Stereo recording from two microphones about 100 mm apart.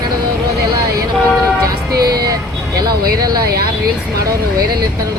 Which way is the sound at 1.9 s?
40° right (ahead or behind).